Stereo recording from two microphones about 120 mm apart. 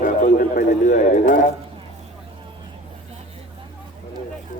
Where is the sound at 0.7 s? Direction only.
90° left.